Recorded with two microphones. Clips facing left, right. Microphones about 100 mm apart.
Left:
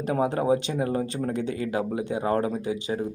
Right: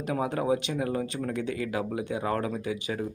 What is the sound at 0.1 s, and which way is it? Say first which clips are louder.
A man's voice: left 4 dB; 35° left (ahead or behind).